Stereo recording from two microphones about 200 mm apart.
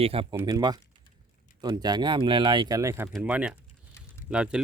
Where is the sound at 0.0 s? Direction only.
25° right (ahead or behind).